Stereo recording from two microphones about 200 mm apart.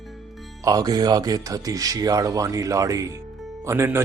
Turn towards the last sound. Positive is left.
turn(degrees=-10)  # may be behind; listen again after turning